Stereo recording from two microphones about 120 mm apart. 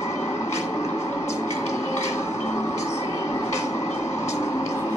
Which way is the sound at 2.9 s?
25° left (ahead or behind).